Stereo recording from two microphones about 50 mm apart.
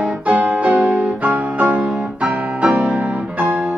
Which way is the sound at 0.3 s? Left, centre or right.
Right.